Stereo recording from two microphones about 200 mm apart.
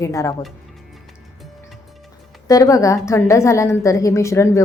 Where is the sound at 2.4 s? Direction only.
15° left (ahead or behind).